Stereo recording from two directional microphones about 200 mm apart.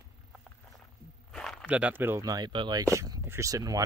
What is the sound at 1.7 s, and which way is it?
Speech, 10° right (ahead or behind).